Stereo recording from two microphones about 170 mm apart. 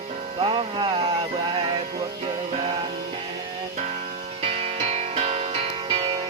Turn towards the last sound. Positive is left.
turn(degrees=-35)  # may be behind; listen again after turning